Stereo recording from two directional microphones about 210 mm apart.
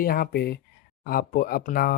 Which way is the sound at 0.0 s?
45° left (ahead or behind).